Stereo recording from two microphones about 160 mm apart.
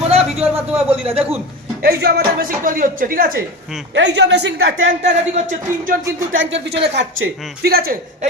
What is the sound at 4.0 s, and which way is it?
Speech, 90° right.